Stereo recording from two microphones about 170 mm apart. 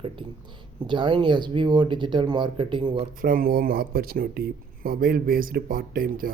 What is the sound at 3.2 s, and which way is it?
Speech, 55° right (ahead or behind).